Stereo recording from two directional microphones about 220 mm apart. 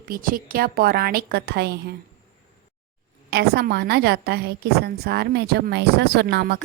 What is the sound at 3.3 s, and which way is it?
A woman's voice, 45° right (ahead or behind).